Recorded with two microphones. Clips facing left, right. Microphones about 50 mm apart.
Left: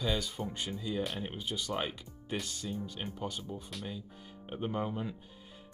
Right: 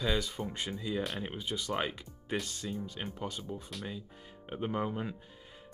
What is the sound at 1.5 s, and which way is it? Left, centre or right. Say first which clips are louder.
Speech: right 2 dB; right.